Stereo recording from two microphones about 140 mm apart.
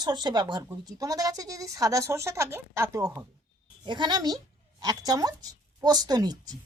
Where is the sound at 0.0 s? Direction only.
30° right (ahead or behind).